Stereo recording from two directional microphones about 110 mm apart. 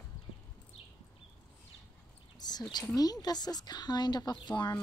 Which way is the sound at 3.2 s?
40° left (ahead or behind).